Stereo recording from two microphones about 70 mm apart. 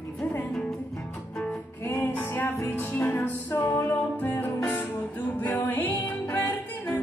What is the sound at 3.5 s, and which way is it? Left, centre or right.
Music, left.